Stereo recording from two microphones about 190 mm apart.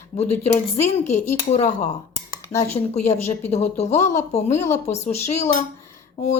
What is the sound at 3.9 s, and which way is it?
Cutlery, 15° left (ahead or behind).